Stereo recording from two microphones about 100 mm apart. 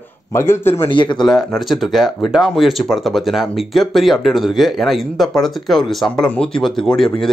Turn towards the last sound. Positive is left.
turn(degrees=5)  # may be behind; listen again after turning